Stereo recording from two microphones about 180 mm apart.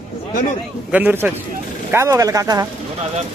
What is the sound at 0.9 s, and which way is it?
A man's voice, 10° right (ahead or behind).